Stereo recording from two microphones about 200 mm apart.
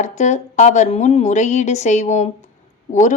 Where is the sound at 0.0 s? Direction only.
35° left (ahead or behind).